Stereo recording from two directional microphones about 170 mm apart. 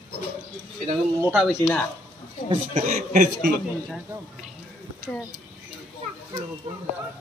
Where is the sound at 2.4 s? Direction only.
45° right (ahead or behind).